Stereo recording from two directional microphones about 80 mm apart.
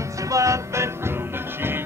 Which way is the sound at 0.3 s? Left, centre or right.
Right.